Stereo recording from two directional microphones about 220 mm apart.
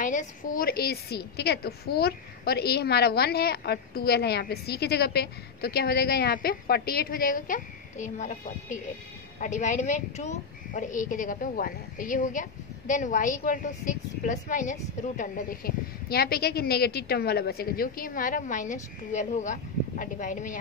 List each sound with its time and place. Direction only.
0.0 s a woman's voice: 35° left (ahead or behind)